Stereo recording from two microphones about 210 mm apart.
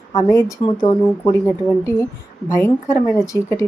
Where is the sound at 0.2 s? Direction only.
15° left (ahead or behind).